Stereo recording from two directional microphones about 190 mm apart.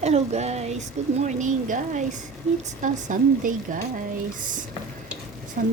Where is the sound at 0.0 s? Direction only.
35° right (ahead or behind).